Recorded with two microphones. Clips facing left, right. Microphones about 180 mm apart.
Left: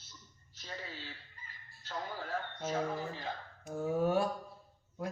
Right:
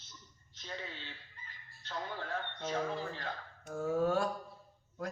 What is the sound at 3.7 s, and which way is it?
Speech, 15° left (ahead or behind).